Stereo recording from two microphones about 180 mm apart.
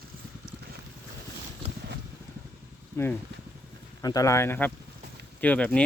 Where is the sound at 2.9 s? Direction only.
10° left (ahead or behind).